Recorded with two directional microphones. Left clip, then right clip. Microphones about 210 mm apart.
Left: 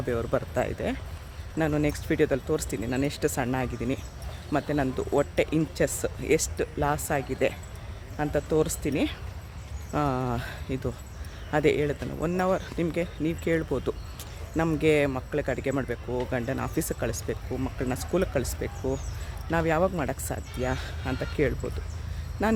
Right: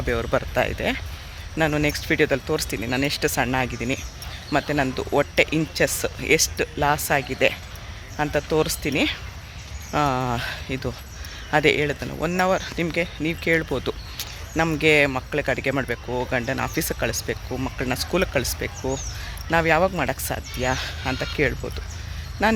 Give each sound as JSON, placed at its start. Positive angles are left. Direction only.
{"t": 0.0, "sound": "speech", "side_deg": -5}